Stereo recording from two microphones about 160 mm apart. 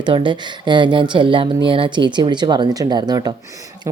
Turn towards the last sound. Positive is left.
turn(degrees=-25)  # may be behind; listen again after turning